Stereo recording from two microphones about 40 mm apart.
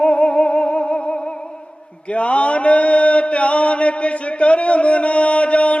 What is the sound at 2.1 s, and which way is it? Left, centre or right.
Mantra, left.